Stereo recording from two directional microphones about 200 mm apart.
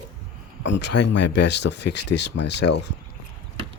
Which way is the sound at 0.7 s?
60° left (ahead or behind).